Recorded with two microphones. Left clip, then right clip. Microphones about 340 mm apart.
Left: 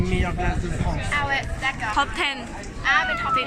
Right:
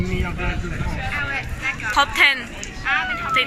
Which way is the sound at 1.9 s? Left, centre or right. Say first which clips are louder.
Right 10 dB; centre.